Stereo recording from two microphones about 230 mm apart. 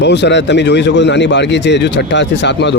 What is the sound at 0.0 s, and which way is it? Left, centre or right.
A man's voice, left.